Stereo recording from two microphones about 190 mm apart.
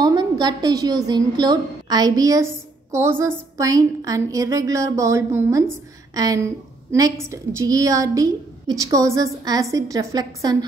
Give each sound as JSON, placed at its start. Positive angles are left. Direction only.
{"t": 0.0, "sound": "a woman's voice", "side_deg": -20}